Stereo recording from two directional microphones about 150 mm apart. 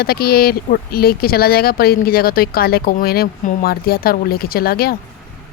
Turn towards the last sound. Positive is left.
turn(degrees=90)